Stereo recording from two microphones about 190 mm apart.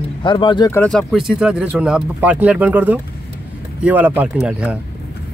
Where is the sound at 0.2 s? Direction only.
25° left (ahead or behind).